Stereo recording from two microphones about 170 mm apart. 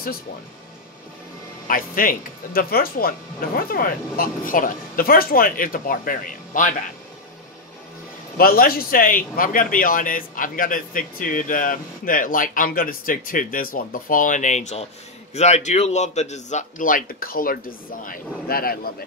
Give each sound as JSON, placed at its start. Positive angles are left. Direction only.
{"t": 1.7, "sound": "speech", "side_deg": 55}
{"t": 8.4, "sound": "a man's voice", "side_deg": 60}